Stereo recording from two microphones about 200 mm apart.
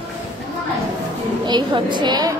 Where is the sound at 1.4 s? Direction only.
20° right (ahead or behind).